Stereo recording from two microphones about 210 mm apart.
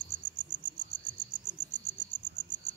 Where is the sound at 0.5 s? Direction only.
25° left (ahead or behind).